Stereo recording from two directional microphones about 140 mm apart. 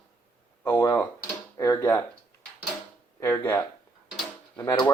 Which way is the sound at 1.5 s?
30° left (ahead or behind).